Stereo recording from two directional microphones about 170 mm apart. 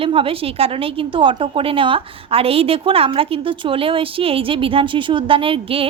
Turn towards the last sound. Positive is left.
turn(degrees=-30)  # may be behind; listen again after turning